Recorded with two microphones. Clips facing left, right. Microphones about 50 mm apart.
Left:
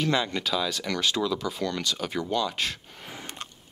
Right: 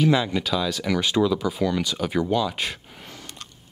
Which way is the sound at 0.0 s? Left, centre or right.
Centre.